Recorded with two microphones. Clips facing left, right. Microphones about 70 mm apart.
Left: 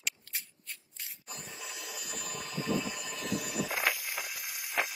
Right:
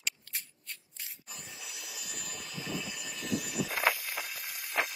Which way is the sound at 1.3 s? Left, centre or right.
Left.